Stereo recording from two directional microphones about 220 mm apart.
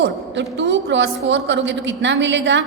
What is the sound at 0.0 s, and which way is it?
A woman's voice, 55° right (ahead or behind).